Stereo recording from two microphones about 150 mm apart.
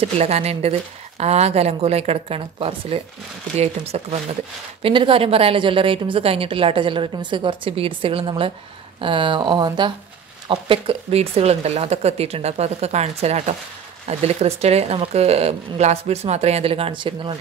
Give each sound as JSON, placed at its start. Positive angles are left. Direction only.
{"t": 0.0, "sound": "a woman's voice", "side_deg": -45}